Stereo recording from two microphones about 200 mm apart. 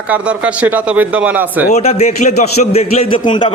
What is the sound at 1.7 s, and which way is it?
A man's voice, 35° left (ahead or behind).